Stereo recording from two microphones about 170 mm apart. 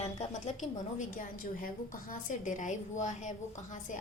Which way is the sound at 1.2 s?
55° left (ahead or behind).